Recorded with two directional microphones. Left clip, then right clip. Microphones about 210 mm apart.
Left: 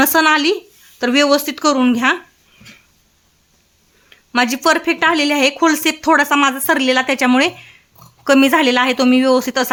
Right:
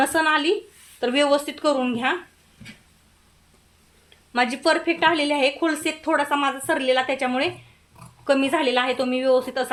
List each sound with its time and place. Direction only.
0.0 s speech: 40° left (ahead or behind)
4.3 s speech: 40° left (ahead or behind)